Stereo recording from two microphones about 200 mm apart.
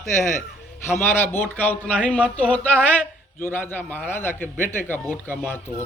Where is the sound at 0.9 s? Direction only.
10° left (ahead or behind).